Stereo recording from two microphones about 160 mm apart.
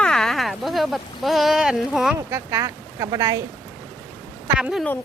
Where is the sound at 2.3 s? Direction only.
20° right (ahead or behind).